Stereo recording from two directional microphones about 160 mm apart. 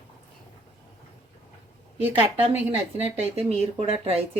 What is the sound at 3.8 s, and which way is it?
Speech, 40° right (ahead or behind).